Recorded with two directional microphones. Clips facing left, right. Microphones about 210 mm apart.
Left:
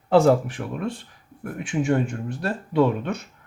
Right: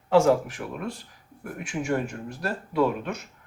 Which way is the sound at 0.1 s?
35° left (ahead or behind).